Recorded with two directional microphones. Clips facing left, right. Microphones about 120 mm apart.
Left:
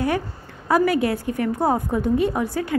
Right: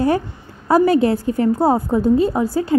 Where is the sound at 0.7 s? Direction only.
30° right (ahead or behind).